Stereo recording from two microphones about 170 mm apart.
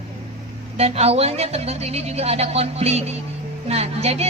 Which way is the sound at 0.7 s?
40° right (ahead or behind).